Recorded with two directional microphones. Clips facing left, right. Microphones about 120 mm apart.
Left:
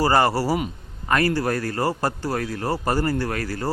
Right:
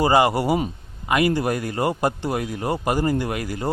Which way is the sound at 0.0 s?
15° right (ahead or behind).